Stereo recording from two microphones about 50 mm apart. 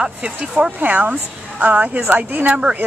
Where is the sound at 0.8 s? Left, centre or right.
Right.